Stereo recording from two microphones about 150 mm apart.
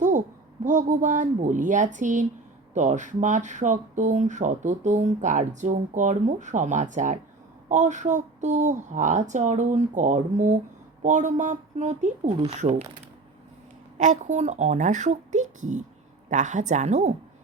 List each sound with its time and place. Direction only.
0.6 s speech: 55° right (ahead or behind)
14.0 s speech: 55° right (ahead or behind)